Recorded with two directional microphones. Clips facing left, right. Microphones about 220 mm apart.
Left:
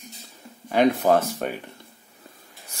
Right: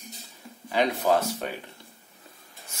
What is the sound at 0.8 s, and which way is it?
Speech, 55° left (ahead or behind).